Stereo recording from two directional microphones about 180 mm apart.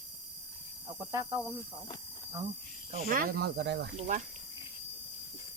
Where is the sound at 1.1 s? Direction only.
20° right (ahead or behind).